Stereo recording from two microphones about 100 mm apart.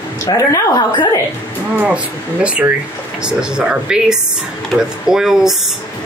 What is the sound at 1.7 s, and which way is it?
Speech, 15° right (ahead or behind).